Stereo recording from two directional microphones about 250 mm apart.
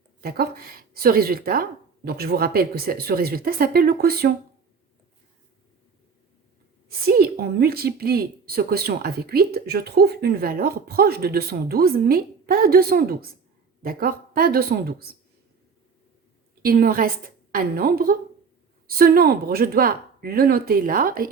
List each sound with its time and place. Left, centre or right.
0.2 s a woman's voice: right
6.8 s a woman's voice: right
16.6 s a woman's voice: right